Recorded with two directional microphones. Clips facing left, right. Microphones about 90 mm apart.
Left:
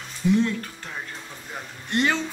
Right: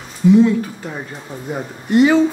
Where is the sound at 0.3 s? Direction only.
10° right (ahead or behind).